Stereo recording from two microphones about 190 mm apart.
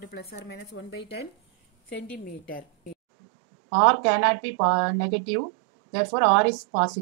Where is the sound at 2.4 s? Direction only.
45° left (ahead or behind).